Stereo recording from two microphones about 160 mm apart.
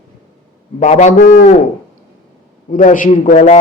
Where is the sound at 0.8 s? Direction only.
45° left (ahead or behind).